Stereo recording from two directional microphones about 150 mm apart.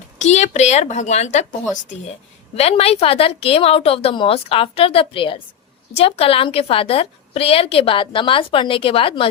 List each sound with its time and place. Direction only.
0.2 s a woman's voice: 50° left (ahead or behind)
2.6 s a woman's voice: 40° left (ahead or behind)